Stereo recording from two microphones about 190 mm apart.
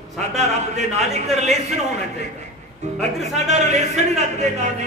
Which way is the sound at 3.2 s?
35° right (ahead or behind).